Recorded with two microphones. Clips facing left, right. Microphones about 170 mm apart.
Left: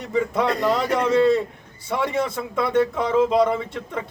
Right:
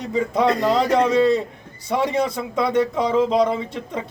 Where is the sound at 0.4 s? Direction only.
20° right (ahead or behind).